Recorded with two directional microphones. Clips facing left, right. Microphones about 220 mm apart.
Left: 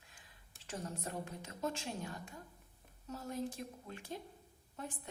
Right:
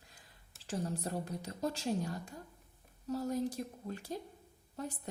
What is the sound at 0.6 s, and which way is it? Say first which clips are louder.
A woman's voice: right 6 dB; 35° right (ahead or behind).